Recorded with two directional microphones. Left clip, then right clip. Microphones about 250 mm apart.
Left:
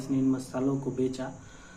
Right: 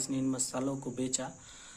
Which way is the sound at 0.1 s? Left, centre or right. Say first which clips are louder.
Left 8 dB; right.